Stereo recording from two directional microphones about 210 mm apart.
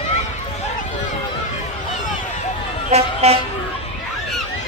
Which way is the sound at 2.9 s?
30° right (ahead or behind).